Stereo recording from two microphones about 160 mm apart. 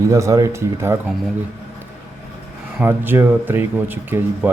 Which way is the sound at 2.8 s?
10° right (ahead or behind).